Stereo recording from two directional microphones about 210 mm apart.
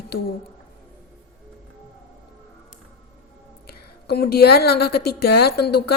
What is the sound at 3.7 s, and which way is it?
Speech, 50° left (ahead or behind).